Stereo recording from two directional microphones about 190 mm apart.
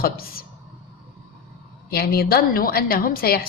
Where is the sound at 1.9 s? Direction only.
55° left (ahead or behind).